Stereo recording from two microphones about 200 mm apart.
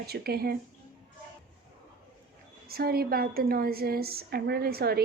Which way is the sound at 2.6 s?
50° right (ahead or behind).